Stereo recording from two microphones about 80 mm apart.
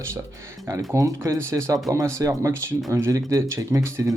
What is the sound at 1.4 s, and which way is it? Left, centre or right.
Speech, right.